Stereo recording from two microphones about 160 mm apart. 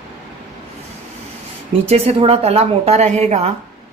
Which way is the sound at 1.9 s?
40° right (ahead or behind).